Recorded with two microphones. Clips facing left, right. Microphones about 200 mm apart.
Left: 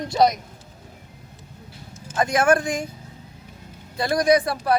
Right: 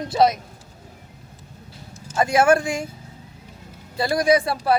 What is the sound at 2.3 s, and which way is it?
Speech, 5° right (ahead or behind).